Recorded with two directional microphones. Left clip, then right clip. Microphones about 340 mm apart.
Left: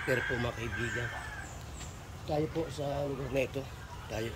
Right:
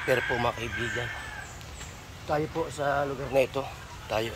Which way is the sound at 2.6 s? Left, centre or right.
Centre.